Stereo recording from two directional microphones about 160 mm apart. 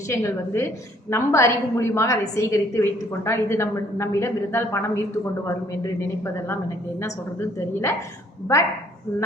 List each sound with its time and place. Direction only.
0.1 s a woman's voice: 20° left (ahead or behind)
7.7 s a woman's voice: 15° left (ahead or behind)